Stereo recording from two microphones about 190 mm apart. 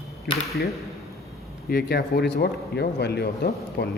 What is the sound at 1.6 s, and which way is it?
Speech, 55° left (ahead or behind).